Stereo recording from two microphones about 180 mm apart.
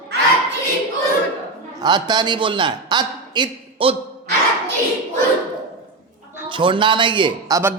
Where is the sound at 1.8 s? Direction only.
25° right (ahead or behind).